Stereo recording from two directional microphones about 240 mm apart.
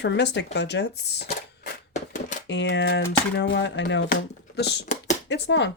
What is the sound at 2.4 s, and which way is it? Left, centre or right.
Speech, left.